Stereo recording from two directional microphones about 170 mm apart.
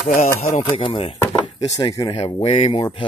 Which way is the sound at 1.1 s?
20° left (ahead or behind).